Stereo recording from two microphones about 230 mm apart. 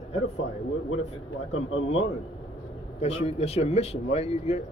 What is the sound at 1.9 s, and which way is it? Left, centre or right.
Speech, left.